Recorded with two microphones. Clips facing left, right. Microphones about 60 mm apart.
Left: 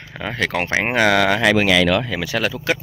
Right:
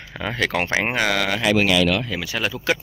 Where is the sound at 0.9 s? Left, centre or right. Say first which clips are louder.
Left 10 dB; left.